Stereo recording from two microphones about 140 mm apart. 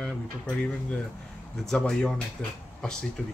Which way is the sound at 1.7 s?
5° left (ahead or behind).